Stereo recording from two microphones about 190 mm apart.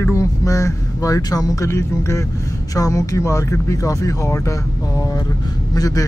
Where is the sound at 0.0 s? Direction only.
15° left (ahead or behind).